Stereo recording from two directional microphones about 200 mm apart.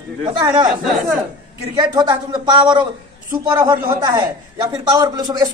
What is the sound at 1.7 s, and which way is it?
A man's voice, 20° right (ahead or behind).